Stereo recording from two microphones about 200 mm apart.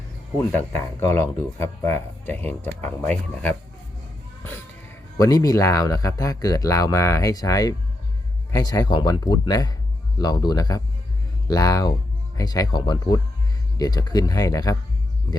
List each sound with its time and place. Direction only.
0.3 s speech: 15° left (ahead or behind)
5.1 s speech: 20° left (ahead or behind)